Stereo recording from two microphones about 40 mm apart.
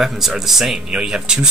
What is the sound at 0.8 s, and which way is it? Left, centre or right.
Speech, right.